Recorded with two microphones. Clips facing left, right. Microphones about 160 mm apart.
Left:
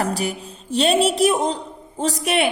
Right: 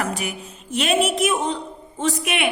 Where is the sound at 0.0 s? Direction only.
35° left (ahead or behind).